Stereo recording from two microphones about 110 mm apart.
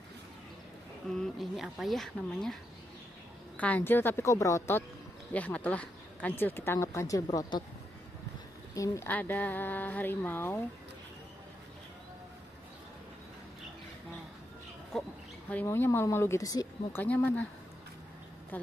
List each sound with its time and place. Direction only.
1.0 s speech: 5° left (ahead or behind)
3.5 s speech: 15° left (ahead or behind)
5.3 s speech: 15° left (ahead or behind)
8.7 s speech: 30° left (ahead or behind)
9.0 s speech: 20° left (ahead or behind)
14.9 s speech: 5° left (ahead or behind)
15.6 s speech: 20° left (ahead or behind)
16.9 s speech: 15° left (ahead or behind)
18.5 s speech: 15° left (ahead or behind)